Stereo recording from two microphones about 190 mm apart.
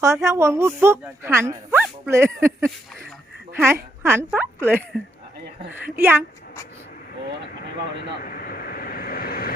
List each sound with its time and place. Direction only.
0.0 s a woman's voice: 15° right (ahead or behind)
6.0 s speech: 10° right (ahead or behind)
8.2 s vehicle: 50° left (ahead or behind)